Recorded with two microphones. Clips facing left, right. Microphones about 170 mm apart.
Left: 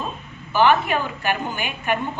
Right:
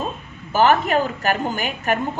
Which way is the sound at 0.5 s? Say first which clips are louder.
Right 1 dB; 40° right (ahead or behind).